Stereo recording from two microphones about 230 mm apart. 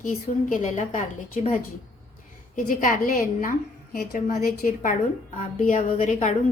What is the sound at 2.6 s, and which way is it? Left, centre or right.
A woman's voice, left.